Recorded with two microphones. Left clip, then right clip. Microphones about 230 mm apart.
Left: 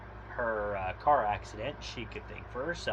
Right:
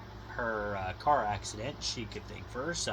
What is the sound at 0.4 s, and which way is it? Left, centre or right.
Speech, centre.